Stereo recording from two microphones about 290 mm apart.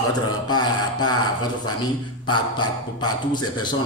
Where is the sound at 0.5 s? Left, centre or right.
Centre.